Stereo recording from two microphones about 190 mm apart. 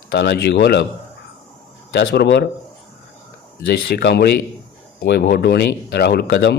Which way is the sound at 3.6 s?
60° left (ahead or behind).